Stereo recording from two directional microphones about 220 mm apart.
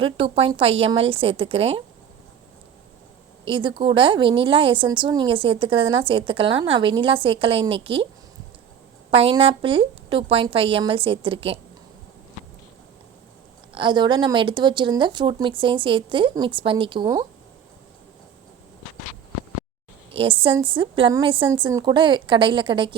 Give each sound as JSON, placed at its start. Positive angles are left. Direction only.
{"t": 0.0, "sound": "a woman's voice", "side_deg": -25}
{"t": 3.4, "sound": "a woman's voice", "side_deg": -25}
{"t": 9.0, "sound": "a woman's voice", "side_deg": -25}
{"t": 13.7, "sound": "a woman's voice", "side_deg": -20}
{"t": 20.1, "sound": "a woman's voice", "side_deg": -25}